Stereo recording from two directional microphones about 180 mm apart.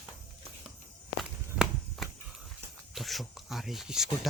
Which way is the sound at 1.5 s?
5° right (ahead or behind).